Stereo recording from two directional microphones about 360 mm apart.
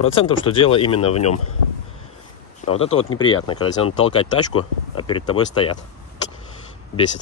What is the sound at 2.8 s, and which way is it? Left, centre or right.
Speech, left.